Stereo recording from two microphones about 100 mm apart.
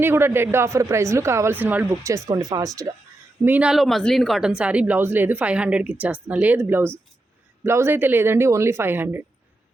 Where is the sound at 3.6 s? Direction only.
Centre (ahead or behind); by 9.2 s 20° right (ahead or behind).